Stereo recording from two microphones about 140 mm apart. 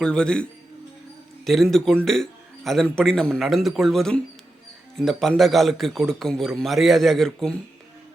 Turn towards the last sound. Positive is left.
turn(degrees=5)  # may be behind; listen again after turning